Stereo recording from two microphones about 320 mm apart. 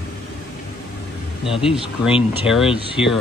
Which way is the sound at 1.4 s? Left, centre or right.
Centre.